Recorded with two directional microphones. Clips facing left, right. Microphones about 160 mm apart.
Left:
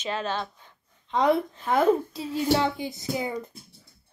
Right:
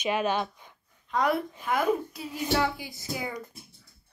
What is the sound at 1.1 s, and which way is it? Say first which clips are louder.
A woman's voice: left 4 dB; 25° left (ahead or behind).